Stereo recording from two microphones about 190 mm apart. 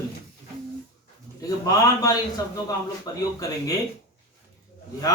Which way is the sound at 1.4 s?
15° left (ahead or behind).